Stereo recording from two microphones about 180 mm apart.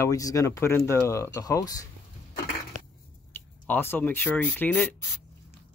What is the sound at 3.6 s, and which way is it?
Speech, 10° left (ahead or behind).